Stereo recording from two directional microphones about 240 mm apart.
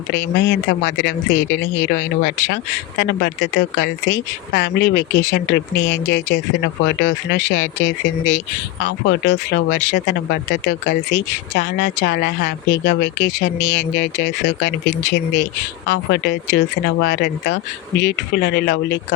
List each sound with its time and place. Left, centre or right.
0.1 s speech: left
8.8 s speech: left